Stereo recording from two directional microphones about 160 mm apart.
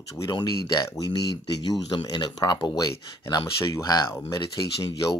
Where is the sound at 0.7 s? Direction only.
20° left (ahead or behind).